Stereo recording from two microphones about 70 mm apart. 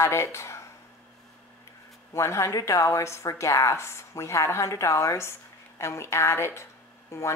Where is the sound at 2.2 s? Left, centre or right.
Left.